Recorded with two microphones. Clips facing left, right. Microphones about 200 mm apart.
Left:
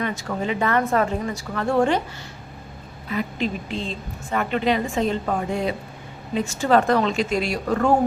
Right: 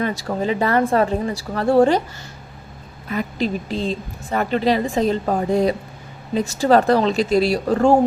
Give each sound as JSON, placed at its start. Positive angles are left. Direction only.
{"t": 0.0, "sound": "a woman's voice", "side_deg": -35}
{"t": 3.1, "sound": "a woman's voice", "side_deg": -40}